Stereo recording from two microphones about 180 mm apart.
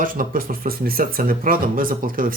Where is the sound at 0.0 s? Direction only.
50° right (ahead or behind).